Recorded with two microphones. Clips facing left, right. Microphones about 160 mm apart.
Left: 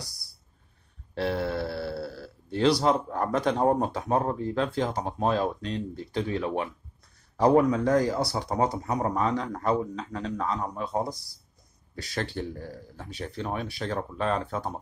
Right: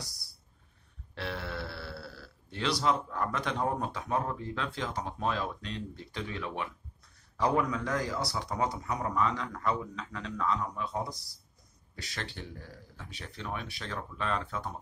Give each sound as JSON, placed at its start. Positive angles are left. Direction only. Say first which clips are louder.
{"t": 1.1, "sound": "speech", "louder": "left 10 dB", "side_deg": 40}